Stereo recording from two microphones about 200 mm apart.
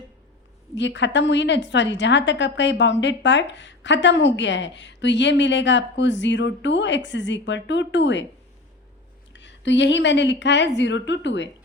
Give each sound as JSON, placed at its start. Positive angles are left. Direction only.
{"t": 0.8, "sound": "a woman's voice", "side_deg": 65}
{"t": 9.3, "sound": "a woman's voice", "side_deg": 65}